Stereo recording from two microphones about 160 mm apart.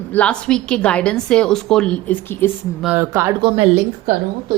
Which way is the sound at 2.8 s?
15° right (ahead or behind).